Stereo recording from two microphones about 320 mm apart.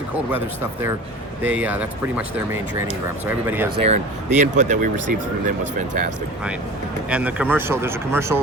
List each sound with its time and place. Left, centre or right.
1.4 s speech: centre
3.2 s speech: centre
3.8 s speech: right
7.1 s speech: centre